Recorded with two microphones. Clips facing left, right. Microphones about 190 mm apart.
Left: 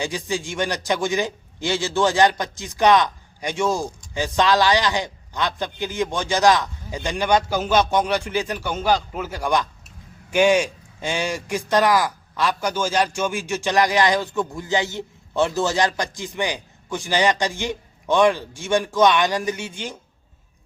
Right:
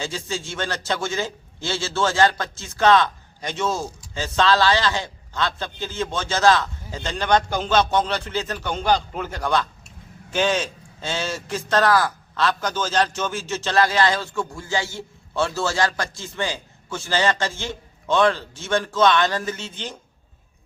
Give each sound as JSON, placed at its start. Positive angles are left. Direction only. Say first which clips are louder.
{"t": 0.0, "sound": "a man's voice", "louder": "left 3 dB", "side_deg": 15}